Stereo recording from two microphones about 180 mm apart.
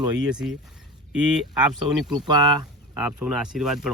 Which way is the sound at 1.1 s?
5° right (ahead or behind).